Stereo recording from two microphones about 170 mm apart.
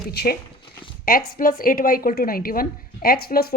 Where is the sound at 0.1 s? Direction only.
70° left (ahead or behind).